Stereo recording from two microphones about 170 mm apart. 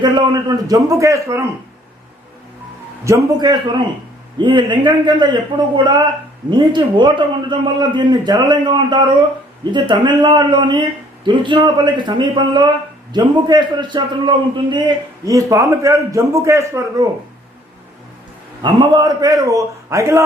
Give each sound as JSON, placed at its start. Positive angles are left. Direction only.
{"t": 0.0, "sound": "a man's voice", "side_deg": -25}
{"t": 3.0, "sound": "a man's voice", "side_deg": -20}
{"t": 18.6, "sound": "a man's voice", "side_deg": -25}